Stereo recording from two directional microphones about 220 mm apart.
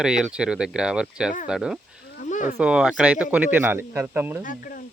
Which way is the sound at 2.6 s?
5° right (ahead or behind).